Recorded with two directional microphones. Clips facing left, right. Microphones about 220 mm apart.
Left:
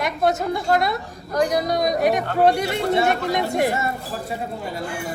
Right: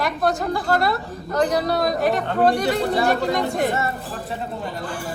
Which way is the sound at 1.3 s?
10° left (ahead or behind).